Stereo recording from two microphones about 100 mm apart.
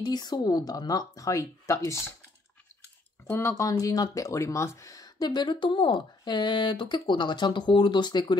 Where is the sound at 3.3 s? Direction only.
25° left (ahead or behind).